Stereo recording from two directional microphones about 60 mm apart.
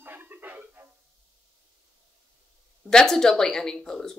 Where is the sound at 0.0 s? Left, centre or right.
Right.